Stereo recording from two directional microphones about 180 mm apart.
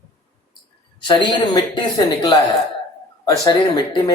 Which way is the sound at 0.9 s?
25° left (ahead or behind).